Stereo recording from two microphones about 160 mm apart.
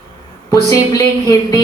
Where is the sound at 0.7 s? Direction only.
20° left (ahead or behind).